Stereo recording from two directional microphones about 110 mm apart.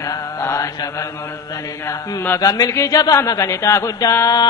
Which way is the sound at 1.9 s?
20° left (ahead or behind).